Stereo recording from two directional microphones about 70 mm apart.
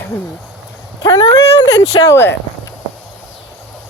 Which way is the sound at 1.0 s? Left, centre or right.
Left.